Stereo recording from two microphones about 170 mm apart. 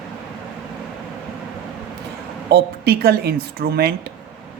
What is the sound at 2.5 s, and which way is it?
Speech, 65° right (ahead or behind).